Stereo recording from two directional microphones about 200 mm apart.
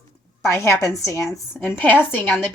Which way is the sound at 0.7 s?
15° left (ahead or behind).